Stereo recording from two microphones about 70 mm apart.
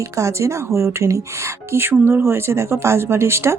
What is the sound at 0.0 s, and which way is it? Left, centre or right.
Speech, right.